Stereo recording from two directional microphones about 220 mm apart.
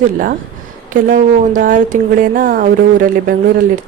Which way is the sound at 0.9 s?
35° right (ahead or behind).